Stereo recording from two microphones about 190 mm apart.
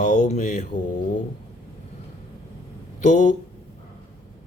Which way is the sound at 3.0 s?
40° left (ahead or behind).